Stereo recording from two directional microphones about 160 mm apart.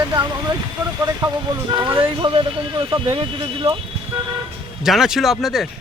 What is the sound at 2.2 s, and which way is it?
Speech, 30° right (ahead or behind).